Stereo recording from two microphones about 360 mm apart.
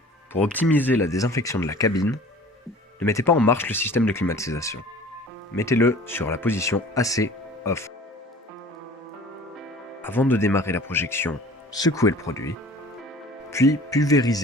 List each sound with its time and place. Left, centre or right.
0.3 s speech: centre
10.0 s speech: centre